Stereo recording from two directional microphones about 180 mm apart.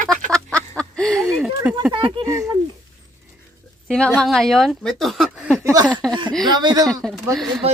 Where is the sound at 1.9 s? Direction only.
30° right (ahead or behind).